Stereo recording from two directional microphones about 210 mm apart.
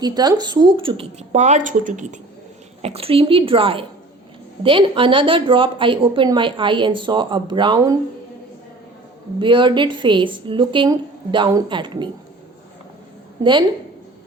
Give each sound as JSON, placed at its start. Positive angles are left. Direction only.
{"t": 0.0, "sound": "speech", "side_deg": -20}
{"t": 9.4, "sound": "speech", "side_deg": -25}
{"t": 13.4, "sound": "speech", "side_deg": -20}